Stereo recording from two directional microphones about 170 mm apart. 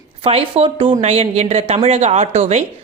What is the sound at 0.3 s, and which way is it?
Speech, 35° right (ahead or behind).